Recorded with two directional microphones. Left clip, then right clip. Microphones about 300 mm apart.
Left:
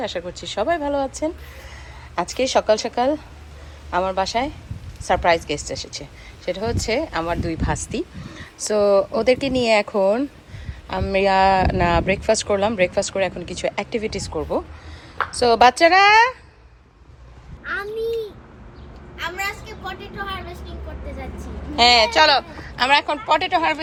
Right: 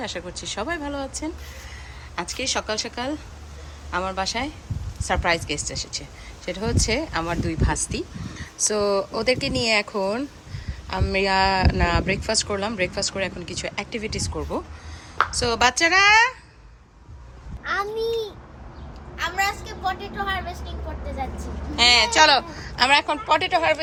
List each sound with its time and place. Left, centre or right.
0.0 s a woman's voice: centre
19.2 s vehicle: centre
21.8 s a woman's voice: centre